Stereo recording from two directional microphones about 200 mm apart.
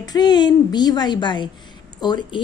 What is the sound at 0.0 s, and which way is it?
A woman's voice, 20° left (ahead or behind).